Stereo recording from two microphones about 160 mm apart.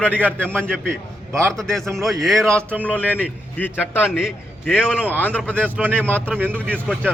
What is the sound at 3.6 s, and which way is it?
Speech, 10° left (ahead or behind).